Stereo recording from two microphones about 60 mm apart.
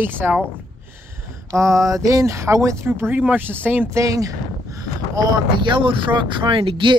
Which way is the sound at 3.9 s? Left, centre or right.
Right.